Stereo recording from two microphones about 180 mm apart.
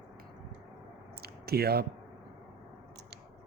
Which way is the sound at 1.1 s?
60° right (ahead or behind).